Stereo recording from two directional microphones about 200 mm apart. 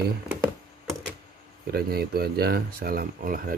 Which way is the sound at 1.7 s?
50° right (ahead or behind).